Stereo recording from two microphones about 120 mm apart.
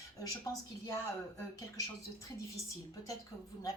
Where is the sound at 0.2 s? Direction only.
30° left (ahead or behind).